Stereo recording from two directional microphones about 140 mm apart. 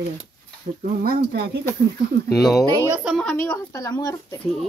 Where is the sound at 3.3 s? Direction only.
15° left (ahead or behind).